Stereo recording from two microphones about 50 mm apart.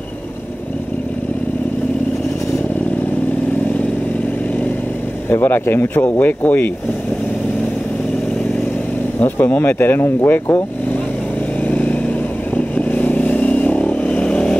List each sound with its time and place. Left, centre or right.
5.3 s speech: left
5.9 s speech: left
9.2 s speech: left
9.6 s speech: left
11.6 s vehicle: left